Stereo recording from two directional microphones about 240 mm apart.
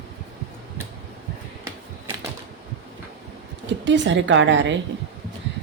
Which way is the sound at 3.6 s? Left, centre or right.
Right.